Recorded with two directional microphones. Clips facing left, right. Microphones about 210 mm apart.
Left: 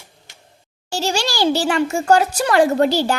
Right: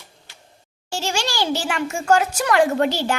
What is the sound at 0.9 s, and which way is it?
A child's voice, 35° left (ahead or behind).